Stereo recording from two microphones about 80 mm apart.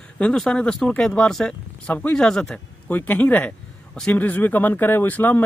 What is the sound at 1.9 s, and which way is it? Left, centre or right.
Speech, left.